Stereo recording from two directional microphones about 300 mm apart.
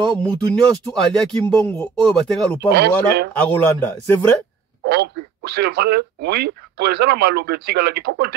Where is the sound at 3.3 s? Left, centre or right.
Centre.